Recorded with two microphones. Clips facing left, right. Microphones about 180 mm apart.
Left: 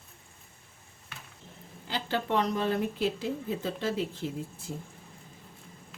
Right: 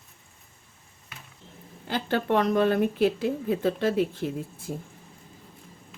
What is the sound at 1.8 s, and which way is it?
Speech, 55° right (ahead or behind).